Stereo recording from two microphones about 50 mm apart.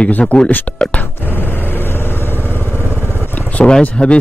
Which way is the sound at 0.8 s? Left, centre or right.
Left.